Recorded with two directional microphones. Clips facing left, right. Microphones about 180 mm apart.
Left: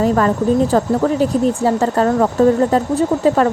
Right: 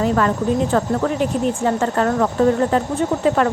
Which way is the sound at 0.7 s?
35° left (ahead or behind).